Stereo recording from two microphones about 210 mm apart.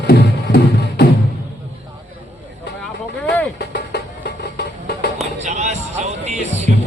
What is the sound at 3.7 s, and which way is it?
Music, 55° left (ahead or behind).